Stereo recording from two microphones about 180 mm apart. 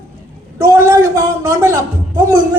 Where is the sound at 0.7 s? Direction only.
15° right (ahead or behind).